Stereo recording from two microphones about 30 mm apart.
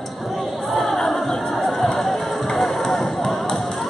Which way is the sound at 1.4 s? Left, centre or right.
Centre.